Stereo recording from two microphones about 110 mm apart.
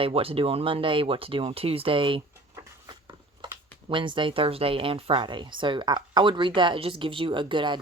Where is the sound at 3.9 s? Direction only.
50° right (ahead or behind).